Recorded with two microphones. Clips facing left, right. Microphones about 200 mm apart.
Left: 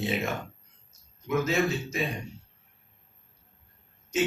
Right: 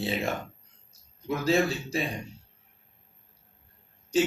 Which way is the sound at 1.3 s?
30° right (ahead or behind).